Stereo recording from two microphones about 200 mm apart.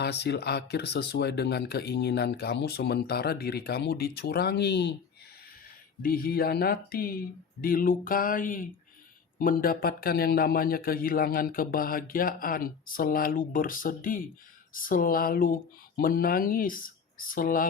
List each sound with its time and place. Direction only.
0.0 s speech: 55° left (ahead or behind)
6.0 s a man's voice: 45° left (ahead or behind)